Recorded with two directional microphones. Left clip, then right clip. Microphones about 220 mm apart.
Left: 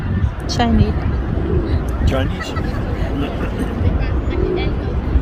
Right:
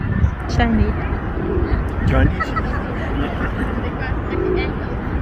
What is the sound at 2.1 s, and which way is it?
Speech, 50° left (ahead or behind).